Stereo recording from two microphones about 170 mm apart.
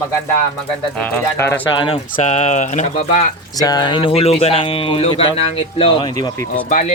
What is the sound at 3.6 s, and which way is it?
Speech, 25° left (ahead or behind).